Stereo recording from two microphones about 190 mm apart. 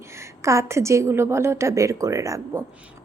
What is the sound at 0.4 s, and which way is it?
Speech, 15° right (ahead or behind).